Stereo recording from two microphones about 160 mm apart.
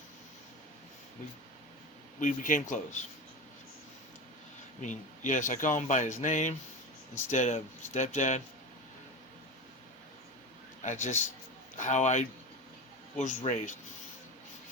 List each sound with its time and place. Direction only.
2.2 s speech: 55° left (ahead or behind)
4.8 s speech: 50° left (ahead or behind)
10.8 s speech: 50° left (ahead or behind)